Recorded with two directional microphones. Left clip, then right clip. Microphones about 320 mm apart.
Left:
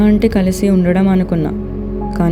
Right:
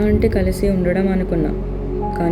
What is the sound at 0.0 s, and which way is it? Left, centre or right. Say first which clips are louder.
Speech: left 3 dB; left.